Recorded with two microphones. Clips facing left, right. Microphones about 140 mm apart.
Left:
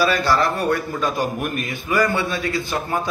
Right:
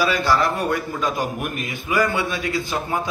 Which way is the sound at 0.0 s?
15° right (ahead or behind).